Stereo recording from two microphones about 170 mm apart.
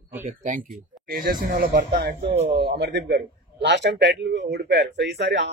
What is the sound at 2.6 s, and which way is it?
Speech, 80° right.